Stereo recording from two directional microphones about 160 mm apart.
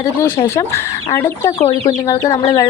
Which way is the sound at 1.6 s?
40° left (ahead or behind).